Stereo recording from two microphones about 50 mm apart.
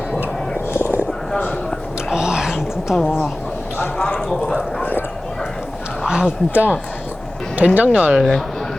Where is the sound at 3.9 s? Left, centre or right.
Centre.